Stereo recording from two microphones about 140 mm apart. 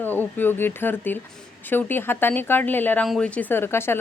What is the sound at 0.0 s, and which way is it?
Speech, 15° left (ahead or behind).